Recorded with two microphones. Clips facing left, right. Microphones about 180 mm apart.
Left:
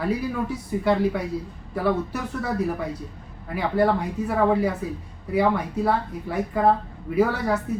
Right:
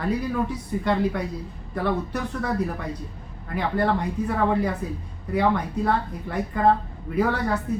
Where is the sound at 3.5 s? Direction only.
10° left (ahead or behind).